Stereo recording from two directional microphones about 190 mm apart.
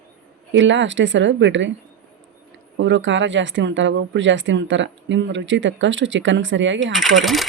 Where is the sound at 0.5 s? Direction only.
75° right (ahead or behind).